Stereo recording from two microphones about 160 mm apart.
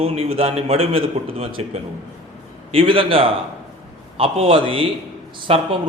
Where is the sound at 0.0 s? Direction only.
40° right (ahead or behind).